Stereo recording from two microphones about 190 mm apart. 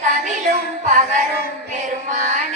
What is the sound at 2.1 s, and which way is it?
Music, 40° right (ahead or behind).